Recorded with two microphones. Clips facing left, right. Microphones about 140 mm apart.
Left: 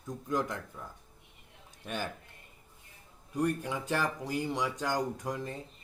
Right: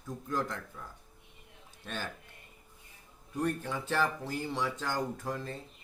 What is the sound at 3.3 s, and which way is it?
Speech, 10° left (ahead or behind).